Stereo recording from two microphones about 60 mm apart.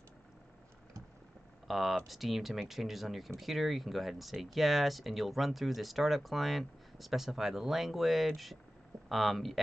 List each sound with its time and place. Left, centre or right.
1.7 s speech: centre